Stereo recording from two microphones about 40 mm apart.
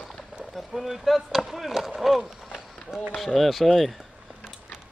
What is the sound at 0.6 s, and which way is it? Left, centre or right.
Speech, centre.